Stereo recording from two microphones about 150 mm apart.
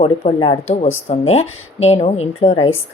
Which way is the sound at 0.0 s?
40° left (ahead or behind).